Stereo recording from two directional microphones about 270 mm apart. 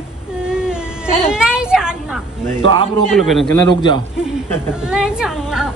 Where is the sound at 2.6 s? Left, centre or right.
Centre.